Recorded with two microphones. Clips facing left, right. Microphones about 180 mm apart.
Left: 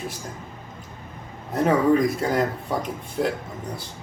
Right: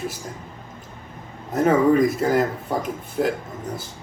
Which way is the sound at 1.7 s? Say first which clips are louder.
Right 2 dB; 5° right (ahead or behind).